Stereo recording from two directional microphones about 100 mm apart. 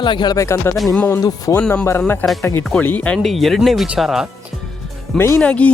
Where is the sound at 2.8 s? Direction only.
15° left (ahead or behind).